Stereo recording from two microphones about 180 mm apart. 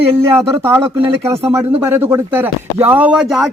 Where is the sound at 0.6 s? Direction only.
15° right (ahead or behind).